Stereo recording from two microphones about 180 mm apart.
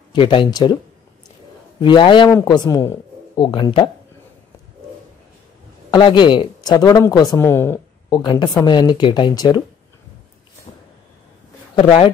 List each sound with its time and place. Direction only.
0.1 s speech: 30° left (ahead or behind)
1.8 s speech: 25° left (ahead or behind)
5.9 s speech: 25° left (ahead or behind)
8.1 s speech: 25° left (ahead or behind)
11.7 s speech: 30° left (ahead or behind)